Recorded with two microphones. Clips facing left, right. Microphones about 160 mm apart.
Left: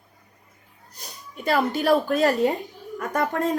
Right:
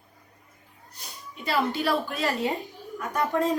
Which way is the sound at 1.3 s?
50° left (ahead or behind).